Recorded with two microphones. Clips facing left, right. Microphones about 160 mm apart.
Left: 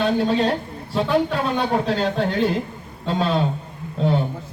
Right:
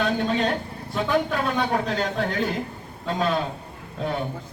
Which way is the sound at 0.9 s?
30° left (ahead or behind).